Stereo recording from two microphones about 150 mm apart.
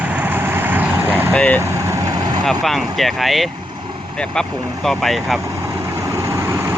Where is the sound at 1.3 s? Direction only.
10° left (ahead or behind).